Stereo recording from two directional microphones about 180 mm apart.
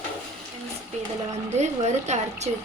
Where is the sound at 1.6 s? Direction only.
40° right (ahead or behind).